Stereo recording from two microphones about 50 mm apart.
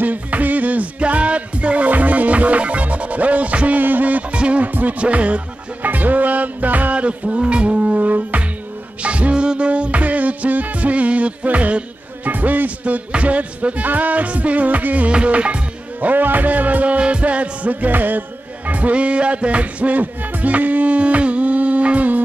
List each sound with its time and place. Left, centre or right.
0.0 s music: right
16.0 s music: right